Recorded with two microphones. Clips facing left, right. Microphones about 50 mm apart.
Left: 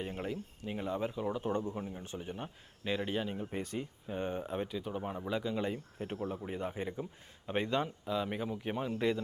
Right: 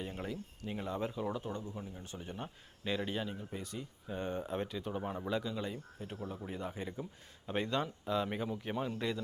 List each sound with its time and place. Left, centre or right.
0.0 s speech: centre
1.5 s speech: left
1.8 s speech: left
2.1 s a man's voice: centre
3.3 s speech: left
4.1 s speech: centre
4.5 s a man's voice: centre
5.4 s speech: left
8.0 s a man's voice: centre